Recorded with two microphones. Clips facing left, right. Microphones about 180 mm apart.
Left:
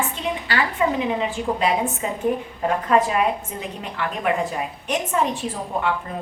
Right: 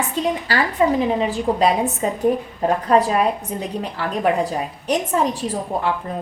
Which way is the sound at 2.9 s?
35° right (ahead or behind).